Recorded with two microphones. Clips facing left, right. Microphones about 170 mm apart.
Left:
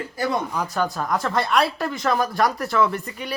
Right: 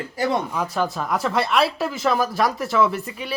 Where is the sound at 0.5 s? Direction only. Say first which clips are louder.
Right 1 dB; centre (ahead or behind).